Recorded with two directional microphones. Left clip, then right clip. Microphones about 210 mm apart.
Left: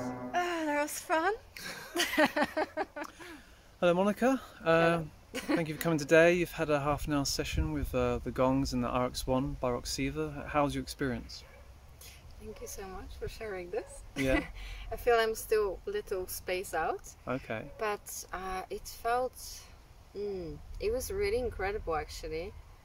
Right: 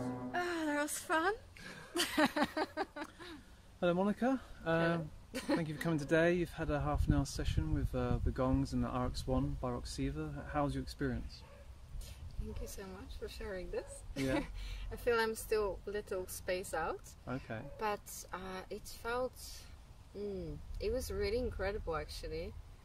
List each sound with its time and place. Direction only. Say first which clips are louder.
0.0 s music: left 4 dB; 40° left (ahead or behind)
0.3 s a sound: left 6 dB; 5° right (ahead or behind)
1.5 s a sound: left 8 dB; 55° left (ahead or behind)
2.0 s speech: left 5 dB; 5° right (ahead or behind)
3.8 s speech: left 6 dB; 35° left (ahead or behind)
5.3 s speech: left 4 dB; centre (ahead or behind)
5.6 s speech: left 6 dB; 35° left (ahead or behind)
13.4 s speech: left 5 dB; centre (ahead or behind)
17.2 s speech: left 8 dB; 35° left (ahead or behind)
17.7 s speech: left 2 dB; centre (ahead or behind)
20.8 s speech: left 5 dB; centre (ahead or behind)